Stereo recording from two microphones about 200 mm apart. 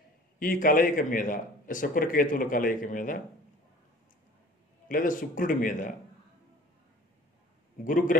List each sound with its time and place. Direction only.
0.4 s a man's voice: 45° left (ahead or behind)
4.8 s a man's voice: 40° left (ahead or behind)
7.8 s a man's voice: 40° left (ahead or behind)